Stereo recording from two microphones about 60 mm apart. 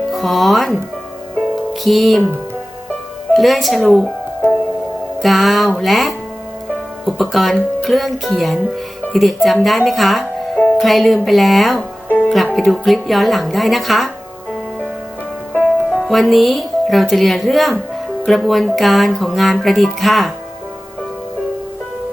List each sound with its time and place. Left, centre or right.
0.1 s speech: centre
1.8 s speech: centre
3.3 s speech: centre
5.2 s speech: centre
12.0 s music: left
12.5 s speech: centre
15.9 s speech: centre